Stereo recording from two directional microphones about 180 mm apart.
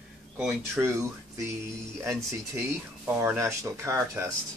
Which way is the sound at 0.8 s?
15° right (ahead or behind).